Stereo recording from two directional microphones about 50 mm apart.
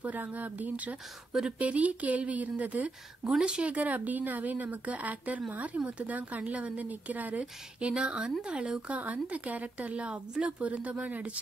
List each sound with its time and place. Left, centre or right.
0.0 s speech: right
3.3 s speech: centre
3.6 s speech: right
7.9 s speech: centre